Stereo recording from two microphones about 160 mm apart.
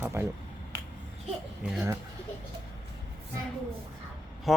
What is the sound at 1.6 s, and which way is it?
Speech, 5° right (ahead or behind).